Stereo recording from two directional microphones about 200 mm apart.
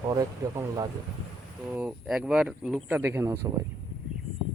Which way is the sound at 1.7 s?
5° right (ahead or behind).